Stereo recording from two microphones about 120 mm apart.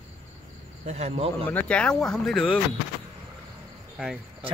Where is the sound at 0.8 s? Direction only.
60° right (ahead or behind).